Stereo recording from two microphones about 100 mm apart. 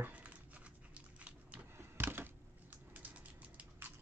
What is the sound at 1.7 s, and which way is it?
Computer keyboard, 20° right (ahead or behind).